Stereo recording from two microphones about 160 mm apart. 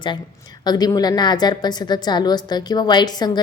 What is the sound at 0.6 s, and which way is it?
A woman's voice, 25° left (ahead or behind).